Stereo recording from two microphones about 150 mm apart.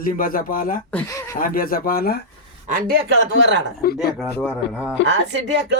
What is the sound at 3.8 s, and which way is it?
Speech, 80° left.